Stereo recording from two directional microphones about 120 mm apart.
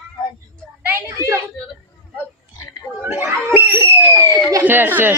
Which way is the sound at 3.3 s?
15° right (ahead or behind).